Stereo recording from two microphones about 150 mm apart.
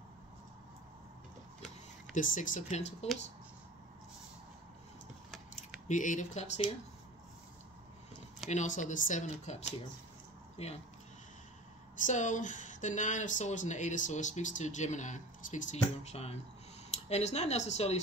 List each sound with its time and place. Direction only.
2.1 s speech: 60° left (ahead or behind)
5.6 s speech: 55° left (ahead or behind)
8.5 s speech: 55° left (ahead or behind)
12.0 s speech: 55° left (ahead or behind)